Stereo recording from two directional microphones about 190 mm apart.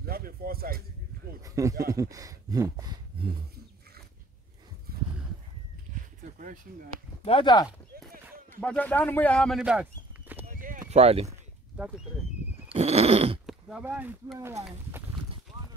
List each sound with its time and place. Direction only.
0.0 s a sound: 50° right (ahead or behind)
1.4 s speech: 15° right (ahead or behind)
6.4 s speech: 45° right (ahead or behind)
7.2 s speech: 25° left (ahead or behind)
8.1 s a sound: 50° right (ahead or behind)
8.5 s speech: 10° left (ahead or behind)
9.6 s clip-clop: 5° right (ahead or behind)
10.5 s clip-clop: 45° right (ahead or behind)
11.7 s speech: 5° right (ahead or behind)
12.7 s a sound: 35° right (ahead or behind)
13.5 s speech: 5° right (ahead or behind)